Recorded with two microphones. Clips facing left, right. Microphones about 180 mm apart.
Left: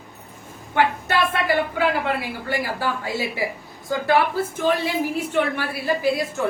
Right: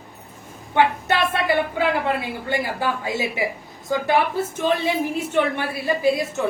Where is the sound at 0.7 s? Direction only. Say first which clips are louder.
Right 1 dB; 20° right (ahead or behind).